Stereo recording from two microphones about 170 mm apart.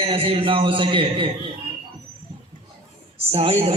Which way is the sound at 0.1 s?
30° right (ahead or behind).